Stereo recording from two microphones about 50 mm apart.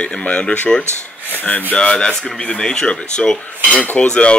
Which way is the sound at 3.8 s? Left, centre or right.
Left.